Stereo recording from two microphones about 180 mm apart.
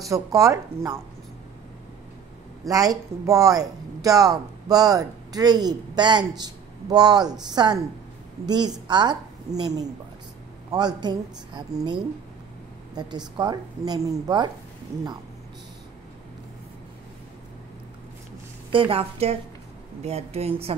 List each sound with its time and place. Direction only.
0.1 s speech: 20° right (ahead or behind)
2.6 s speech: 20° right (ahead or behind)
18.7 s speech: 30° right (ahead or behind)